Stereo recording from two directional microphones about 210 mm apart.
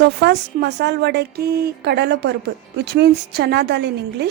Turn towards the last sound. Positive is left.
turn(degrees=-50)  # may be behind; listen again after turning